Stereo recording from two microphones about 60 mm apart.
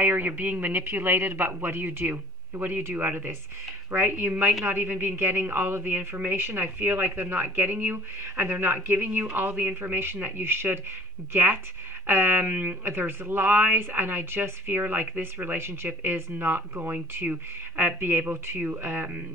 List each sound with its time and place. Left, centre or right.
0.0 s speech: right
4.3 s a woman's voice: right